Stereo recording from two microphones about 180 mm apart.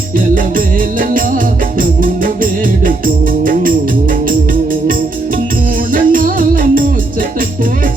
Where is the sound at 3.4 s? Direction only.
50° right (ahead or behind).